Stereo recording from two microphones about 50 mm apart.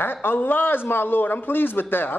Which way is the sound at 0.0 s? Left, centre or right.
Left.